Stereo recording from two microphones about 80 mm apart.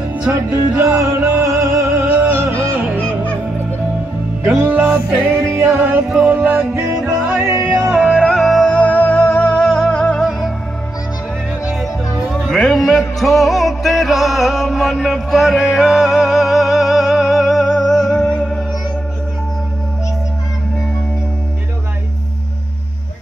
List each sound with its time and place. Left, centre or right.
0.3 s music: right
1.9 s music: right
4.6 s music: right
7.5 s music: right
7.9 s music: centre
8.2 s music: centre
8.6 s music: centre
11.7 s music: centre